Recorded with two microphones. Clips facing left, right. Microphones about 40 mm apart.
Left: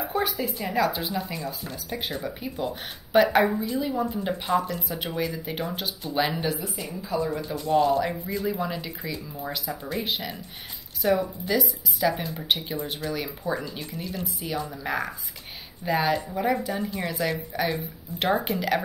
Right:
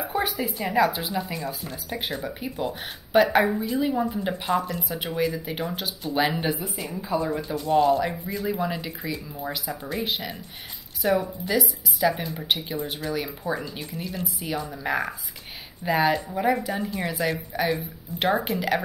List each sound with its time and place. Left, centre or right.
0.1 s speech: centre
3.8 s speech: centre
6.4 s speech: centre
7.3 s speech: centre